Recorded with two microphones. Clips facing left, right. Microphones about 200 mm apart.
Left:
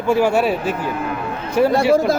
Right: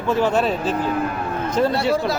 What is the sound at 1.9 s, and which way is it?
Speech, 45° left (ahead or behind).